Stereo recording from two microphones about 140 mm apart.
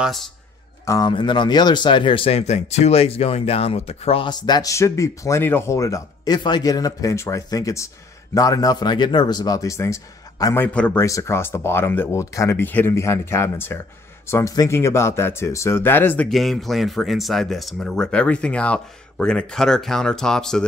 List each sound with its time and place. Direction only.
0.0 s speech: centre (ahead or behind)
0.8 s speech: 30° left (ahead or behind); by 4.3 s 45° left (ahead or behind)
4.3 s speech: 30° left (ahead or behind); by 16.3 s 15° left (ahead or behind)
16.3 s speech: centre (ahead or behind)